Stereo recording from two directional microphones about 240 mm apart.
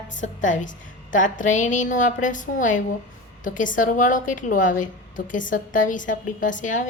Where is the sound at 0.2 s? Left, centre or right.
Left.